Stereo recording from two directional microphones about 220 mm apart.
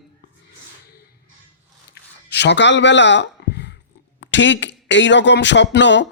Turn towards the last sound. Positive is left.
turn(degrees=55)  # may be behind; listen again after turning